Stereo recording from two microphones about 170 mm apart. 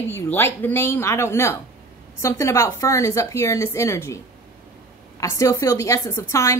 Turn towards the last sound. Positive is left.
turn(degrees=15)  # may be behind; listen again after turning